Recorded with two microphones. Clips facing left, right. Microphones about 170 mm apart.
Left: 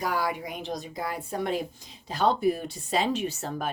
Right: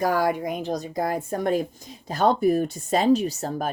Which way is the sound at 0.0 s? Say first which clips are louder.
Right 7 dB; 50° right (ahead or behind).